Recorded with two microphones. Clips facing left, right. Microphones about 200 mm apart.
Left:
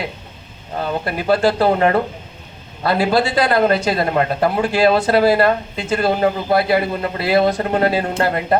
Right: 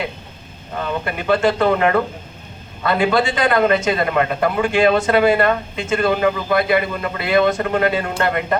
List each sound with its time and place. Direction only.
0.8 s speech: 35° left (ahead or behind)